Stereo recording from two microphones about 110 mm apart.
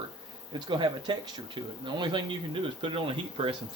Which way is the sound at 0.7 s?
45° right (ahead or behind).